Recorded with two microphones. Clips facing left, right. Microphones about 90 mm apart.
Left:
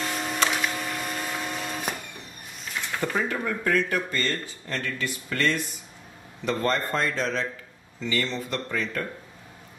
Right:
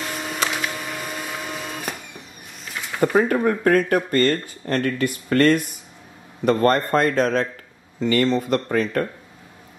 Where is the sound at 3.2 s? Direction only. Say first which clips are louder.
Right 11 dB; 50° right (ahead or behind).